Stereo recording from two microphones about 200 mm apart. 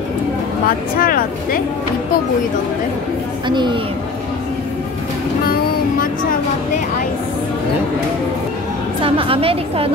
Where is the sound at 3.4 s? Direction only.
25° right (ahead or behind).